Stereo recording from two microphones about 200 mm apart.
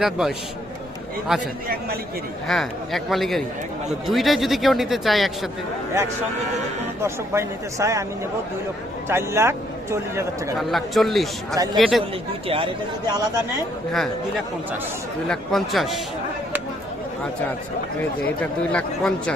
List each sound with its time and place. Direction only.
0.0 s speech: centre (ahead or behind)
2.5 s speech: centre (ahead or behind)
7.0 s a man's voice: 15° right (ahead or behind)
9.0 s a man's voice: 15° right (ahead or behind)
10.6 s speech: centre (ahead or behind)
11.5 s speech: 20° right (ahead or behind)
11.8 s speech: centre (ahead or behind)
12.5 s speech: 25° right (ahead or behind)
15.3 s speech: centre (ahead or behind)
18.3 s speech: 5° left (ahead or behind)